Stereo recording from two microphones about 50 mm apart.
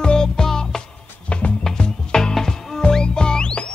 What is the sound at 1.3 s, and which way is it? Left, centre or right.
Music, left.